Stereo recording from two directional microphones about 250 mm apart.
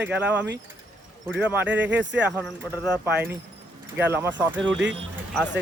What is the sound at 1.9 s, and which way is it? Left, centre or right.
Speech, right.